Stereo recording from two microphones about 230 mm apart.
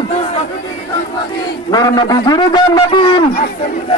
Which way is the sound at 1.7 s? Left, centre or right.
Centre.